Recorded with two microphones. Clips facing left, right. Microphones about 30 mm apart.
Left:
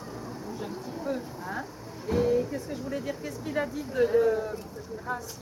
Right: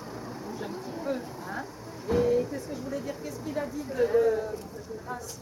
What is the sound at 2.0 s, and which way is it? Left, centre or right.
Vehicle, centre.